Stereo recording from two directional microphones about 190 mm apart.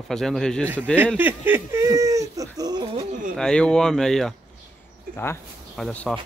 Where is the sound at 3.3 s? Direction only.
5° left (ahead or behind).